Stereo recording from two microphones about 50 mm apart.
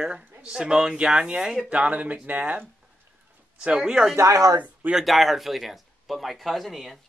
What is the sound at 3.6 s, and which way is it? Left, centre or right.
Speech, centre.